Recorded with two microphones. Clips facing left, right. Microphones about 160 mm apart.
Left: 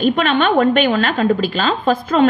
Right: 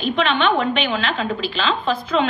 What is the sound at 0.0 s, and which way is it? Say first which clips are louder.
A woman's voice: left 4 dB; 45° left (ahead or behind).